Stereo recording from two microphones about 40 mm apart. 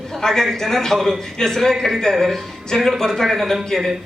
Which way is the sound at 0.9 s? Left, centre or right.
Centre.